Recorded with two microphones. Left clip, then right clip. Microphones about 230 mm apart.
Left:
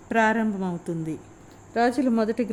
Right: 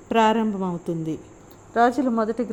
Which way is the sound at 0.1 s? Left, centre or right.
Centre.